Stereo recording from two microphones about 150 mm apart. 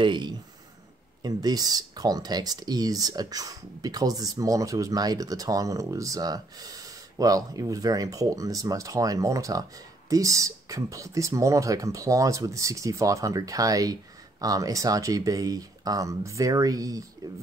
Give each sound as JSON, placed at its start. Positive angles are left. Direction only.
{"t": 0.0, "sound": "speech", "side_deg": -30}